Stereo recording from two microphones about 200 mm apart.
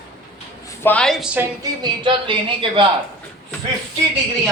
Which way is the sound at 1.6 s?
25° right (ahead or behind).